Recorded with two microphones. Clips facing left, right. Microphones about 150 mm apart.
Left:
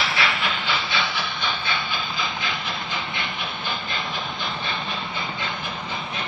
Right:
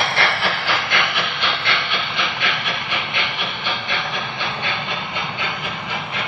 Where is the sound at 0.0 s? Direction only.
65° right (ahead or behind).